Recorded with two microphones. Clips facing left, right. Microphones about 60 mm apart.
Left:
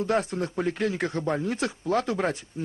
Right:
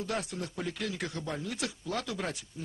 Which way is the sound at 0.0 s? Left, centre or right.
Left.